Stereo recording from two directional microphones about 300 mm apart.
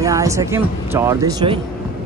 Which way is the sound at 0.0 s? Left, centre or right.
Centre.